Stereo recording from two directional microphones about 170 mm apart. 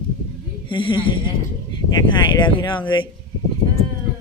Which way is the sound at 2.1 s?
30° left (ahead or behind).